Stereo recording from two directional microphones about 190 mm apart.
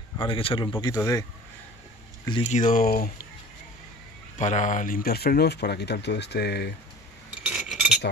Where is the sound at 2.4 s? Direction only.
40° left (ahead or behind).